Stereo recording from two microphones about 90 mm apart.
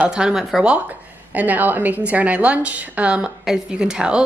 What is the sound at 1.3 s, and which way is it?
A woman's voice, 20° right (ahead or behind).